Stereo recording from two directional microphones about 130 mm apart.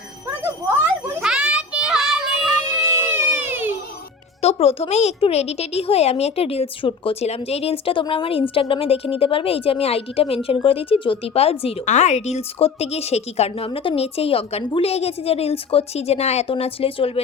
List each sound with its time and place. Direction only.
1.2 s child singing: 5° right (ahead or behind)
3.0 s a sound: 15° right (ahead or behind)
4.4 s a woman's voice: 50° left (ahead or behind)
13.7 s speech: 45° left (ahead or behind)